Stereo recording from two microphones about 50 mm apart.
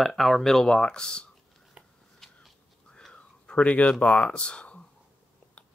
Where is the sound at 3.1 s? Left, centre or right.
Left.